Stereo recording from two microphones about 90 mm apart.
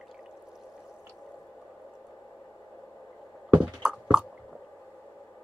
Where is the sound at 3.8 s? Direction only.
10° right (ahead or behind).